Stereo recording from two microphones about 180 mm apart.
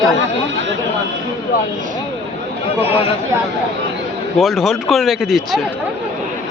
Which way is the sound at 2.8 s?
30° left (ahead or behind).